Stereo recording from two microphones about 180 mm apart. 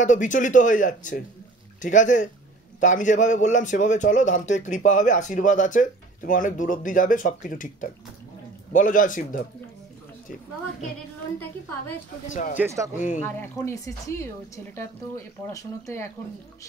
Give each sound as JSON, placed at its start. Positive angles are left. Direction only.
{"t": 0.0, "sound": "a man's voice", "side_deg": 45}
{"t": 12.5, "sound": "speech", "side_deg": -15}
{"t": 12.9, "sound": "a man's voice", "side_deg": 45}
{"t": 13.2, "sound": "speech", "side_deg": 15}